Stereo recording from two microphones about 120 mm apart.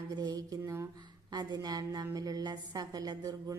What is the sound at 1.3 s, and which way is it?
A woman's voice, 35° right (ahead or behind).